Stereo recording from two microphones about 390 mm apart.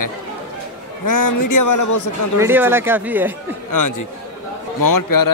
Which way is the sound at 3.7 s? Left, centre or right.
Left.